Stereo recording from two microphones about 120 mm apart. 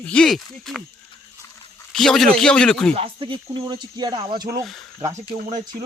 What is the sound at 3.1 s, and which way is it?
Speech, 45° right (ahead or behind).